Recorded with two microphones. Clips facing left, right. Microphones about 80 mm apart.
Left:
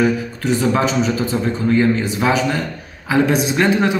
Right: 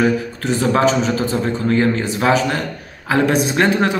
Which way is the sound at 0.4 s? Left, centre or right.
Right.